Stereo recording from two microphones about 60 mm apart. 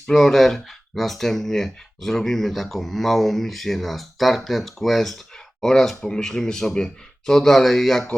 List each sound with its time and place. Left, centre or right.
0.1 s speech: centre